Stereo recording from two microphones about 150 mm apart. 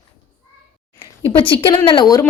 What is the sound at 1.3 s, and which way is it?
A woman's voice, 35° left (ahead or behind).